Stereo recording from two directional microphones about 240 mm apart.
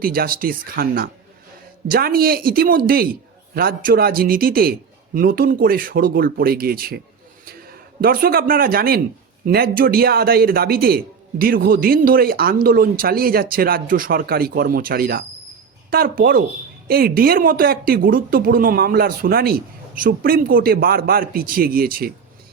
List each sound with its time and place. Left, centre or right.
0.0 s a man's voice: right
8.0 s a man's voice: right